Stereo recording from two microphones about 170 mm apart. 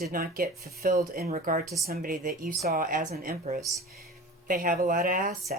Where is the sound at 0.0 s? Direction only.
60° right (ahead or behind).